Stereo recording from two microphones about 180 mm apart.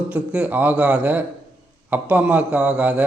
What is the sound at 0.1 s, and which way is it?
A man's voice, 5° right (ahead or behind).